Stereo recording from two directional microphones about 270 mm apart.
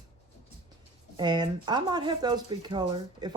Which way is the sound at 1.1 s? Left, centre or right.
Centre.